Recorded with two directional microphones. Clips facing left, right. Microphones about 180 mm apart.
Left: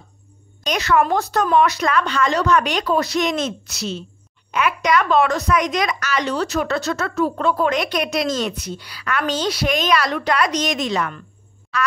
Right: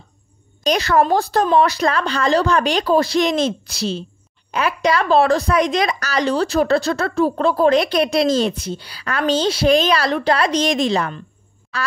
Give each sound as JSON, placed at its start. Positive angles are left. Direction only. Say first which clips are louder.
{"t": 0.7, "sound": "a woman's voice", "louder": "right 2 dB", "side_deg": -35}